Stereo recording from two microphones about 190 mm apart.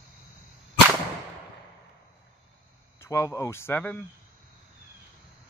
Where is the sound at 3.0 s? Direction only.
15° left (ahead or behind).